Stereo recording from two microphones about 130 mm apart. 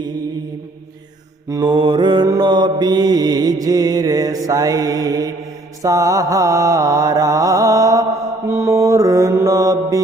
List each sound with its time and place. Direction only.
1.5 s mantra: 30° right (ahead or behind)